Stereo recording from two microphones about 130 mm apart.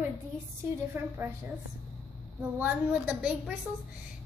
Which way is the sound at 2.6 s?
10° right (ahead or behind).